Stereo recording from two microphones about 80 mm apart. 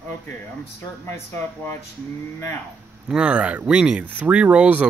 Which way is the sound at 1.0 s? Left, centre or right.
Left.